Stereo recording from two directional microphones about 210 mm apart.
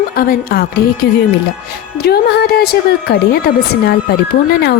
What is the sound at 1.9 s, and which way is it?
A woman's voice, 50° left (ahead or behind).